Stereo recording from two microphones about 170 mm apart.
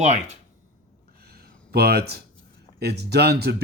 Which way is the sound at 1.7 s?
70° right (ahead or behind).